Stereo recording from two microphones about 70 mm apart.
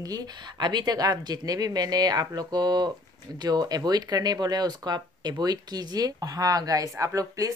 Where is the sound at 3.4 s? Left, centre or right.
Right.